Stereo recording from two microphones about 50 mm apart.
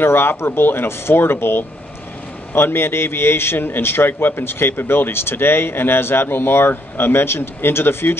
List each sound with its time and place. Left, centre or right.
0.0 s a man's voice: left